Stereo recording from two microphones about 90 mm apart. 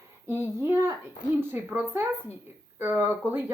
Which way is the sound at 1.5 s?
20° right (ahead or behind).